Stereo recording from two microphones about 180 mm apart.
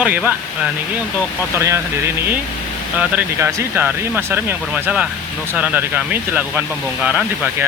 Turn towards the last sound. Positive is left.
turn(degrees=-10)  # may be behind; listen again after turning